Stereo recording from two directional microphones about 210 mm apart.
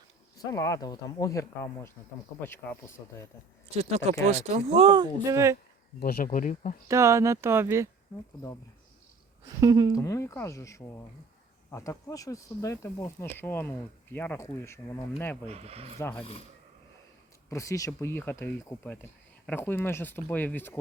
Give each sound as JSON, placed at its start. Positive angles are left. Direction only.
{"t": 0.3, "sound": "speech", "side_deg": 15}
{"t": 3.0, "sound": "speech", "side_deg": 15}
{"t": 3.8, "sound": "speech", "side_deg": -30}
{"t": 6.0, "sound": "speech", "side_deg": 45}
{"t": 6.8, "sound": "speech", "side_deg": -15}
{"t": 9.6, "sound": "speech", "side_deg": -15}
{"t": 9.9, "sound": "speech", "side_deg": 15}
{"t": 15.4, "sound": "speech", "side_deg": -30}
{"t": 16.0, "sound": "speech", "side_deg": 10}
{"t": 16.2, "sound": "speech", "side_deg": 25}
{"t": 17.5, "sound": "speech", "side_deg": 15}